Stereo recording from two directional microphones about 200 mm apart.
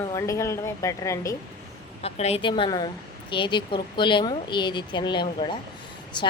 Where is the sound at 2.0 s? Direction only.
30° left (ahead or behind).